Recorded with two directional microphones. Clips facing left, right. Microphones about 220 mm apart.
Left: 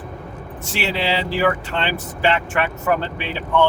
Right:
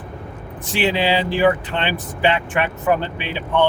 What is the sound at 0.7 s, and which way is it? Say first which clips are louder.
Speech: right 4 dB; 15° right (ahead or behind).